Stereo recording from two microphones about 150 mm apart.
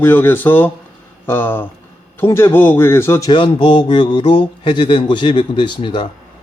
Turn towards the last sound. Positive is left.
turn(degrees=35)  # may be behind; listen again after turning